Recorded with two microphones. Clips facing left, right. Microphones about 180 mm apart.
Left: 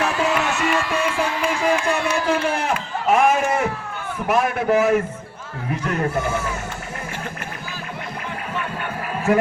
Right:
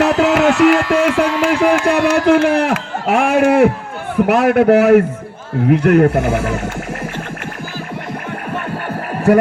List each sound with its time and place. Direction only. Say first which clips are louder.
0.0 s speech: right 9 dB; 75° right (ahead or behind)